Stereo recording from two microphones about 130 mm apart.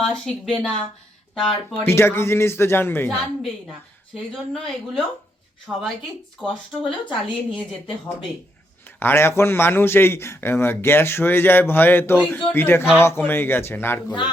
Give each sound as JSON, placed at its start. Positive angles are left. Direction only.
{"t": 0.0, "sound": "speech", "side_deg": 5}
{"t": 1.8, "sound": "speech", "side_deg": 20}
{"t": 3.1, "sound": "speech", "side_deg": 0}
{"t": 7.1, "sound": "a woman's voice", "side_deg": 40}
{"t": 9.0, "sound": "a man's voice", "side_deg": 15}